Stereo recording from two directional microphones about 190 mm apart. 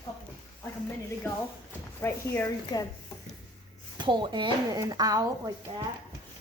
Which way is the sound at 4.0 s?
25° right (ahead or behind).